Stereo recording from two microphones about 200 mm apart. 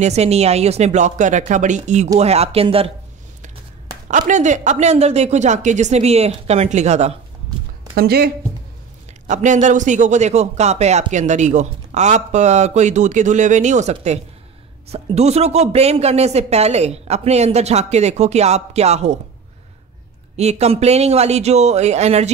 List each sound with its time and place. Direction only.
0.0 s speech: 35° right (ahead or behind)
4.3 s speech: 35° right (ahead or behind)
7.9 s speech: 50° right (ahead or behind)
9.3 s speech: 40° right (ahead or behind)
20.3 s speech: 35° right (ahead or behind)